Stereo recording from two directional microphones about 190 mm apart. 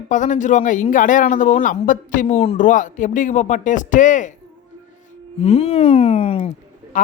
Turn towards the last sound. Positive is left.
turn(degrees=40)  # may be behind; listen again after turning